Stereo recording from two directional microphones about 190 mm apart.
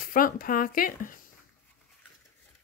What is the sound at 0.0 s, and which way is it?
Speech, 50° left (ahead or behind).